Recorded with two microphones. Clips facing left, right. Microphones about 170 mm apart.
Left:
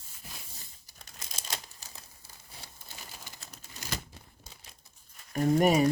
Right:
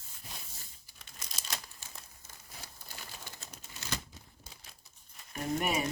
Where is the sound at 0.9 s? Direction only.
45° left (ahead or behind).